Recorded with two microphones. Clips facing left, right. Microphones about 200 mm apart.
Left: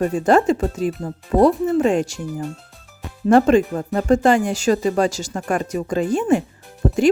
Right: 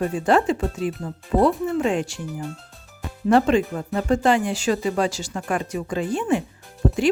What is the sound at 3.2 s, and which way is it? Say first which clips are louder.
Speech: left 4 dB; 45° left (ahead or behind).